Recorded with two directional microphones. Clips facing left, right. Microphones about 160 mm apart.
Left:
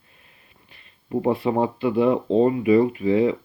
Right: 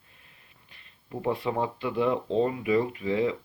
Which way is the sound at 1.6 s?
15° left (ahead or behind).